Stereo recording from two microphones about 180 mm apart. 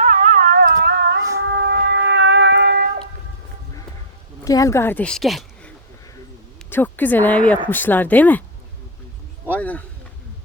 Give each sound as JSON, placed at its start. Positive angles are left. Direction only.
{"t": 0.0, "sound": "a sound", "side_deg": -40}
{"t": 0.8, "sound": "music", "side_deg": -65}
{"t": 4.4, "sound": "speech", "side_deg": 20}
{"t": 6.7, "sound": "speech", "side_deg": 10}
{"t": 9.5, "sound": "speech", "side_deg": 10}